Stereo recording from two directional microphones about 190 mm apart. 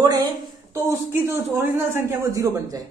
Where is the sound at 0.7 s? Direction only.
15° right (ahead or behind).